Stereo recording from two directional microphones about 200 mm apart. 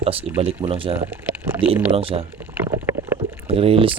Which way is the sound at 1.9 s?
30° right (ahead or behind).